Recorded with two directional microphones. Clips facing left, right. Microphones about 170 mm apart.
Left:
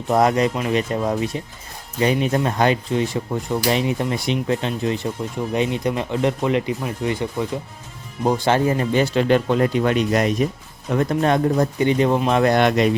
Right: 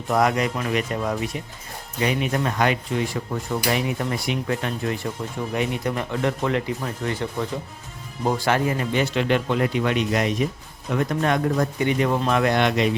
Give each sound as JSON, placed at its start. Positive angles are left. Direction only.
{"t": 0.1, "sound": "speech", "side_deg": 30}
{"t": 8.4, "sound": "speech", "side_deg": 30}